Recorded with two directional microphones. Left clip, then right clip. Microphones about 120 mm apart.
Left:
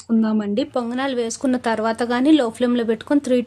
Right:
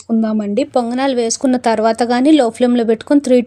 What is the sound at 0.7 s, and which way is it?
Speech, 50° right (ahead or behind).